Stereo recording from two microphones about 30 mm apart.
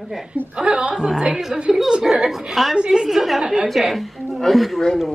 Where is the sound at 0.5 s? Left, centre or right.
Right.